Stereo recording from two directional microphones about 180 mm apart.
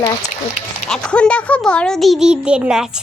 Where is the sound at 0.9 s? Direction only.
5° left (ahead or behind).